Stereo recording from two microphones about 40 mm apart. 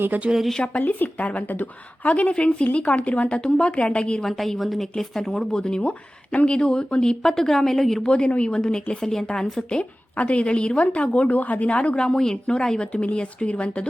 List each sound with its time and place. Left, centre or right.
0.1 s speech: right
0.8 s a woman's voice: left
2.3 s a woman's voice: left
4.2 s a woman's voice: centre; by 7.2 s left
7.2 s speech: centre
8.0 s a woman's voice: left
10.2 s a woman's voice: left
11.9 s a woman's voice: centre; by 13.8 s left